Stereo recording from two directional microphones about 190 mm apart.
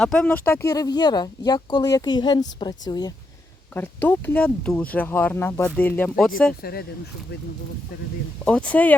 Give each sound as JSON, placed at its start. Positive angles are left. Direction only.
{"t": 0.0, "sound": "speech", "side_deg": 5}
{"t": 3.8, "sound": "speech", "side_deg": 10}
{"t": 6.6, "sound": "speech", "side_deg": 55}
{"t": 8.4, "sound": "speech", "side_deg": 5}